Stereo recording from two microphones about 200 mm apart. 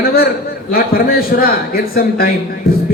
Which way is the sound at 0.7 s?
50° left (ahead or behind).